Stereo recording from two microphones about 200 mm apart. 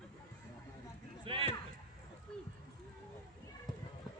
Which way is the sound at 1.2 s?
25° right (ahead or behind).